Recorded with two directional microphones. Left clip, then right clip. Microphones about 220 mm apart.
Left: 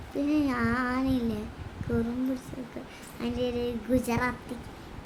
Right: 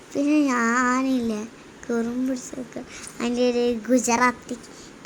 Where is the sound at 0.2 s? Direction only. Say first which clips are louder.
Right 7 dB; 20° right (ahead or behind).